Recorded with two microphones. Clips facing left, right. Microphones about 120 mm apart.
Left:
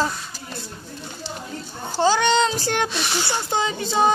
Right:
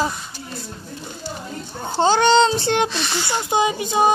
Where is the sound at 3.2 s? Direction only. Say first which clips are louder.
Right 7 dB; 15° right (ahead or behind).